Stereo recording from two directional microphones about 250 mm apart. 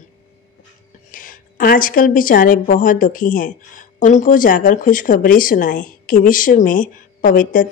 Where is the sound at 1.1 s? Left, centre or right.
Left.